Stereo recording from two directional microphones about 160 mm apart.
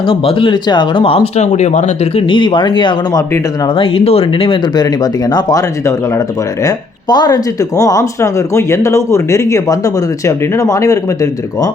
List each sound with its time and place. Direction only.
0.1 s speech: 35° left (ahead or behind)
2.2 s speech: 30° left (ahead or behind)
5.3 s speech: 25° left (ahead or behind)